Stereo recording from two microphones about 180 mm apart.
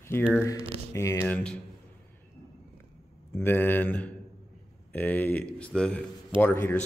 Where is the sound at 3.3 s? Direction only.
10° left (ahead or behind).